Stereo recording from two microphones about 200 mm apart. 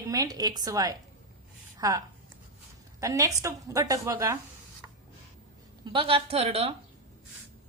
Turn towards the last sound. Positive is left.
turn(degrees=-30)  # may be behind; listen again after turning